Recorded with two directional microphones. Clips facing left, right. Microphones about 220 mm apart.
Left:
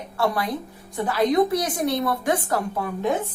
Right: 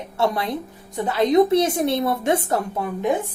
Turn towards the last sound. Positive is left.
turn(degrees=-20)  # may be behind; listen again after turning